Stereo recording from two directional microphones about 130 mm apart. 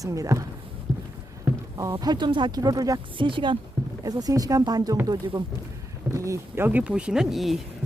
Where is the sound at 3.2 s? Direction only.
40° right (ahead or behind).